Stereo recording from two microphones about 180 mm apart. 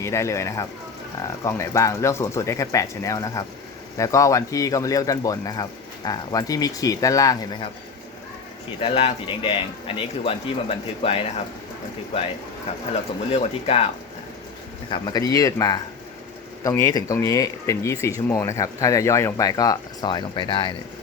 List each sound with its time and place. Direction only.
0.0 s speech: 15° left (ahead or behind)
8.8 s speech: 30° left (ahead or behind)
12.7 s speech: 35° left (ahead or behind)
14.8 s speech: 25° left (ahead or behind)